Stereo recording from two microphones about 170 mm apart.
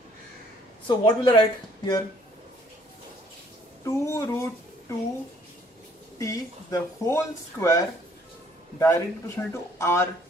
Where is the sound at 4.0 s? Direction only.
15° left (ahead or behind).